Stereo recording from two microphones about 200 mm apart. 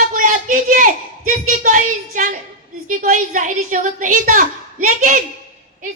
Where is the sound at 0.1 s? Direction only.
40° right (ahead or behind).